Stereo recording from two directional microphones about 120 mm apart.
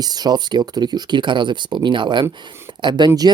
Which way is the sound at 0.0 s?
35° right (ahead or behind).